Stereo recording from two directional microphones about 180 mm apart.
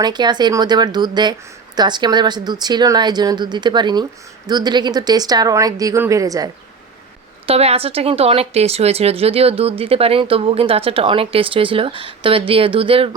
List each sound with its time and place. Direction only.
0.0 s a woman's voice: 25° right (ahead or behind)
7.4 s speech: 35° right (ahead or behind)